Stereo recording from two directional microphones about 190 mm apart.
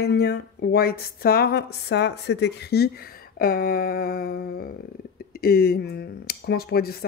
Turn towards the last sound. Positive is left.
turn(degrees=55)  # may be behind; listen again after turning